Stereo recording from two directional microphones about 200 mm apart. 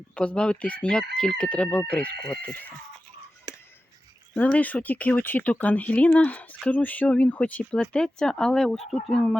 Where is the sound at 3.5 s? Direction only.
20° right (ahead or behind).